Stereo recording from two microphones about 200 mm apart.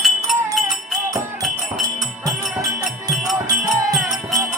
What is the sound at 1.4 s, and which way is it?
Music, centre (ahead or behind).